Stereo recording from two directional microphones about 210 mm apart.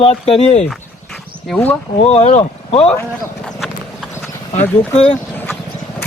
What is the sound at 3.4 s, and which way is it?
Clip-clop, centre (ahead or behind).